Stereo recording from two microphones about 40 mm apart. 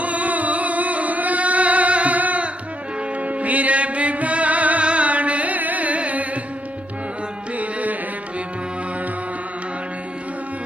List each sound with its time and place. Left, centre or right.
0.0 s music: right
7.6 s music: right